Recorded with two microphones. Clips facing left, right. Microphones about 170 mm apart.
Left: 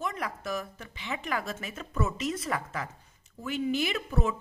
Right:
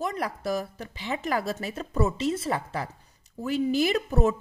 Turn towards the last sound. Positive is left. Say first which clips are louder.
# right 6 dB
turn(degrees=-40)  # may be behind; listen again after turning